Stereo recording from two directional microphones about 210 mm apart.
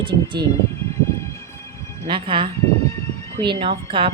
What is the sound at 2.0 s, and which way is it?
A woman's voice, 25° right (ahead or behind).